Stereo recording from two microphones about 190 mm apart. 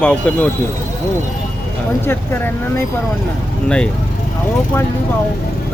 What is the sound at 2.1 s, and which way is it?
Speech, 10° left (ahead or behind).